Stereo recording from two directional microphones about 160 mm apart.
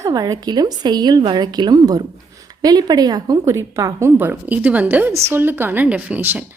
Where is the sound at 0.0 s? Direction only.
20° right (ahead or behind).